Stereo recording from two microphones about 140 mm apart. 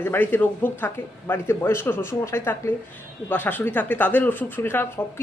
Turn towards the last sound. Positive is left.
turn(degrees=15)  # may be behind; listen again after turning